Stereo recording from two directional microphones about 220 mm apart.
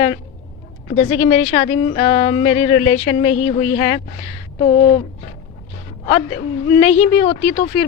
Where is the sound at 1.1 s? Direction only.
30° left (ahead or behind).